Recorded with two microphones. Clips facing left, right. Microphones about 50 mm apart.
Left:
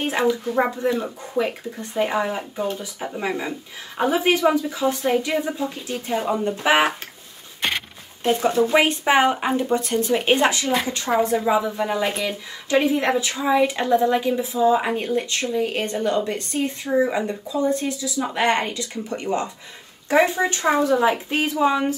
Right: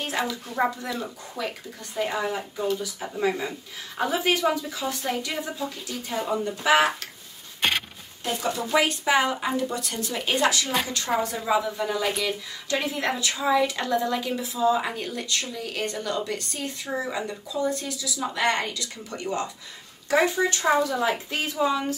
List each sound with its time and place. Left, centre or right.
0.0 s speech: left
8.2 s speech: left